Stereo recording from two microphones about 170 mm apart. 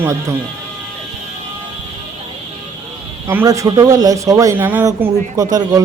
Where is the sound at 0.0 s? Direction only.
20° right (ahead or behind).